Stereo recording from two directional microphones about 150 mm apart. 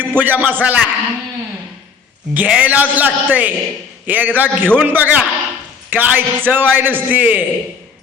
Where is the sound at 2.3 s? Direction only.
10° right (ahead or behind).